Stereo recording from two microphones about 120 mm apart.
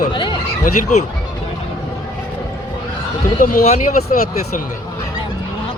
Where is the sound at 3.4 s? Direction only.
75° left (ahead or behind).